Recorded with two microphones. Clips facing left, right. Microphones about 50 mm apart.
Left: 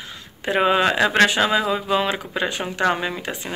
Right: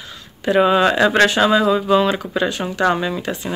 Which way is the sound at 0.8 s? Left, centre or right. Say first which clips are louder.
Right 3 dB; centre.